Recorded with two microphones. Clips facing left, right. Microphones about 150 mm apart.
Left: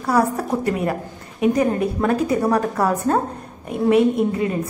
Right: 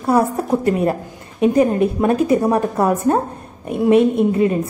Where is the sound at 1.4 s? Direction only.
25° right (ahead or behind).